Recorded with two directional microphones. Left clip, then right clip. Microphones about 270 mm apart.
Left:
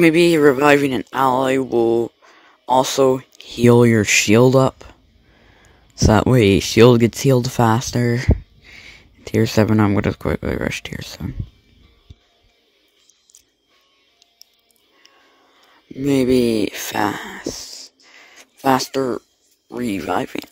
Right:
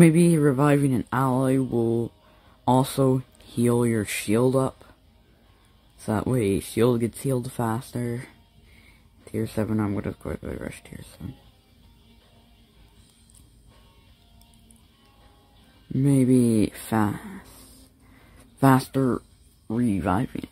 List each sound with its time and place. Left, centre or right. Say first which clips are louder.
0.0 s speech: left 8 dB; left
5.9 s speech: left 12 dB; left
16.1 s speech: left 6 dB; left
18.1 s a sound: left 10 dB; left
19.8 s speech: left 4 dB; left